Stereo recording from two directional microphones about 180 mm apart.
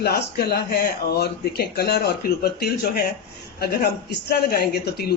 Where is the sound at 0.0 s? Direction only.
60° left (ahead or behind).